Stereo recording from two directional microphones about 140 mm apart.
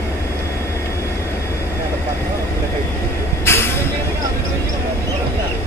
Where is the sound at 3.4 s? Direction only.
15° left (ahead or behind).